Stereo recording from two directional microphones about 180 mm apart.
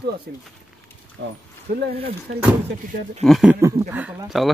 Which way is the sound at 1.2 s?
90° right.